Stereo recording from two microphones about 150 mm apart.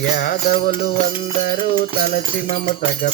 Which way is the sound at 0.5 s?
35° left (ahead or behind).